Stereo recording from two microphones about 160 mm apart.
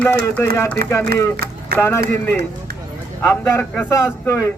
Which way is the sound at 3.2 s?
15° left (ahead or behind).